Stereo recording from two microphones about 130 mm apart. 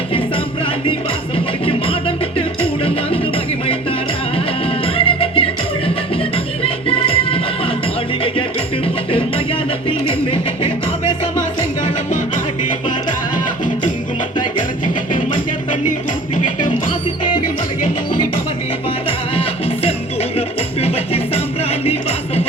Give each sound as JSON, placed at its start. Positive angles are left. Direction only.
{"t": 1.6, "sound": "music", "side_deg": 45}
{"t": 4.6, "sound": "music", "side_deg": 45}
{"t": 20.8, "sound": "music", "side_deg": 50}